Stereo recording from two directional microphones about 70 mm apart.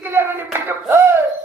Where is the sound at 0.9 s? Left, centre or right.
Right.